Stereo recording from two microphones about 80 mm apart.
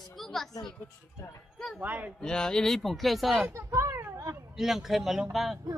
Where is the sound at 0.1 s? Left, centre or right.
Centre.